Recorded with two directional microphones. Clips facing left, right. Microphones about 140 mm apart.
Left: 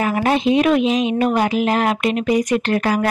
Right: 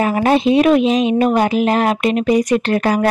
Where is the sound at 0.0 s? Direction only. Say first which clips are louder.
Right 3 dB; 35° right (ahead or behind).